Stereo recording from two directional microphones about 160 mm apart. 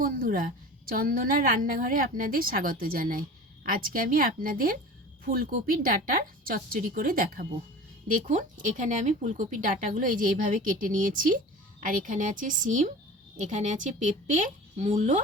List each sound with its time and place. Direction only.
0.0 s speech: 60° right (ahead or behind)